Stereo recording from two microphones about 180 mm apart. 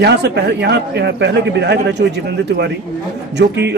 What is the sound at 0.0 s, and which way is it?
A man's voice, 70° right (ahead or behind).